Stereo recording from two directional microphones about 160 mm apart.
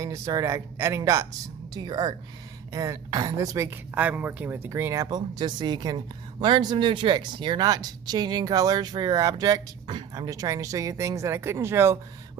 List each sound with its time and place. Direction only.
0.0 s speech: 20° right (ahead or behind)